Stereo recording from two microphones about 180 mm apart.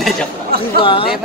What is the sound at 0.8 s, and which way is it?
Speech, 30° left (ahead or behind).